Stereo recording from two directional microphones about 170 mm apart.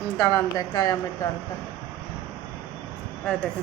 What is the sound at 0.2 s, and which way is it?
Speech, 20° left (ahead or behind).